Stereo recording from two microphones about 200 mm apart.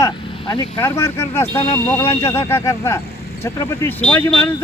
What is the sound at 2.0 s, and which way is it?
Speech, 30° left (ahead or behind).